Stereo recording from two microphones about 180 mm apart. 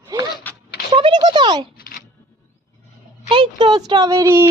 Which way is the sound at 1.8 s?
50° left (ahead or behind).